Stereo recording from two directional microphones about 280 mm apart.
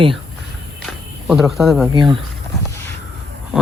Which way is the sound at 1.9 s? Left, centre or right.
Centre.